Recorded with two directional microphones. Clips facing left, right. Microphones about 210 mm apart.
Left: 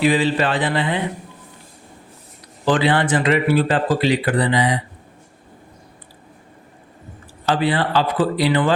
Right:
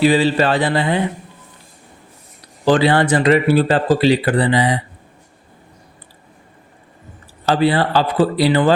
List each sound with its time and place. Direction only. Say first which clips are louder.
0.0 s speech: right 3 dB; 35° right (ahead or behind)
2.6 s speech: right 4 dB; 40° right (ahead or behind)
7.4 s speech: right 4 dB; 35° right (ahead or behind)